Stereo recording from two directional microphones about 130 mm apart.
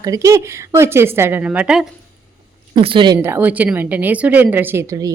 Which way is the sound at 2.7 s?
40° right (ahead or behind).